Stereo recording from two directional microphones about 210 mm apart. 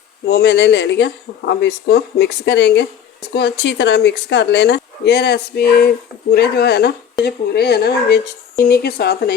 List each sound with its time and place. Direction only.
0.3 s speech: 55° left (ahead or behind)